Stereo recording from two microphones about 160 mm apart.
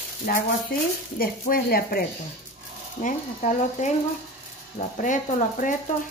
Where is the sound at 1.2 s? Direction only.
70° left (ahead or behind).